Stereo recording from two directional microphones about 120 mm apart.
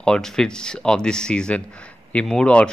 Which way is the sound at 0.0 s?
5° left (ahead or behind).